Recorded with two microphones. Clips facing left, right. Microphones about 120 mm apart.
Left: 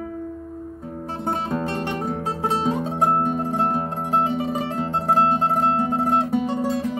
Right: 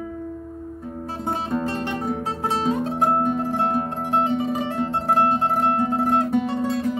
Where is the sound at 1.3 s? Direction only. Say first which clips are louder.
Even; centre (ahead or behind).